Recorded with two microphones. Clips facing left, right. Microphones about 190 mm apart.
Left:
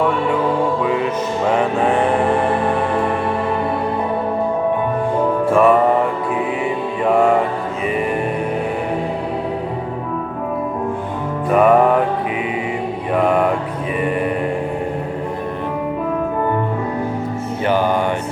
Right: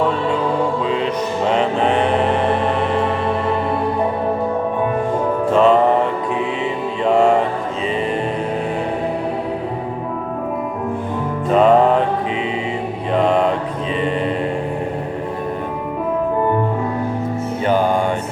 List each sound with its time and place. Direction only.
1.5 s music: 20° right (ahead or behind)
5.5 s music: 20° right (ahead or behind)
7.0 s music: 25° right (ahead or behind)
11.4 s music: 25° right (ahead or behind)
13.1 s a sound: 25° right (ahead or behind)